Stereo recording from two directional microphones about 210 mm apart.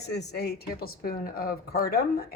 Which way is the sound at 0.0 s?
50° left (ahead or behind).